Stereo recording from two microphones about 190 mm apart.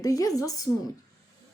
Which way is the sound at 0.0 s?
20° left (ahead or behind).